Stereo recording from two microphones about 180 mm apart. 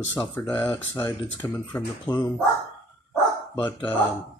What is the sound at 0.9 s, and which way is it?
Speech, 25° left (ahead or behind).